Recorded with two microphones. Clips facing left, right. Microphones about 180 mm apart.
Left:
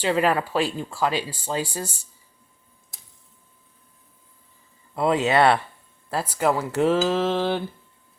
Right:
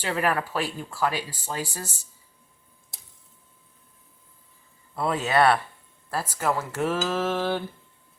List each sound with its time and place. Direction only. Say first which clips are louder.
0.0 s speech: left 5 dB; 20° left (ahead or behind)
4.9 s speech: left 3 dB; 20° left (ahead or behind)